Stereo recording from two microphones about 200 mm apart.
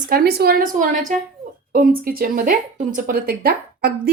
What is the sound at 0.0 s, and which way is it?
A woman's voice, 50° right (ahead or behind).